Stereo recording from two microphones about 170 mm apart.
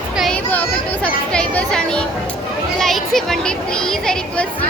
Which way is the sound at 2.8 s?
Centre (ahead or behind).